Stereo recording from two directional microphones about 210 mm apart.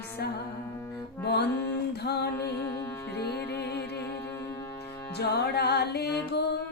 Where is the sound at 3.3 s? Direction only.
50° left (ahead or behind).